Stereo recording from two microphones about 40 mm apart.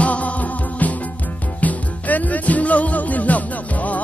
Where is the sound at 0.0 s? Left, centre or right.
Left.